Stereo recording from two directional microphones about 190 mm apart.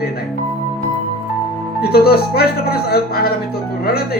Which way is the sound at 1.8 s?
55° left (ahead or behind).